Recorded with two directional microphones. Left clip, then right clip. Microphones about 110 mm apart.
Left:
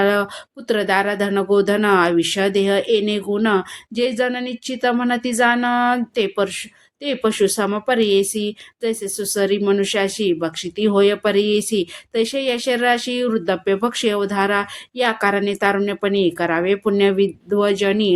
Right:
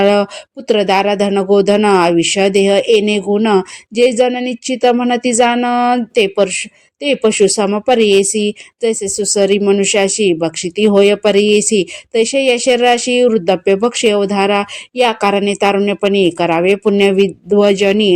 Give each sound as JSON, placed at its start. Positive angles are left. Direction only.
{"t": 0.0, "sound": "speech", "side_deg": -40}